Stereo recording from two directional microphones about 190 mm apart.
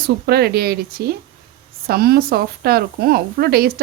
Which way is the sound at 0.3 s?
55° right (ahead or behind).